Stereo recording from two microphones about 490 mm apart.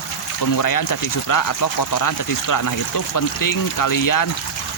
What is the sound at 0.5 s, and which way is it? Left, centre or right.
Speech, left.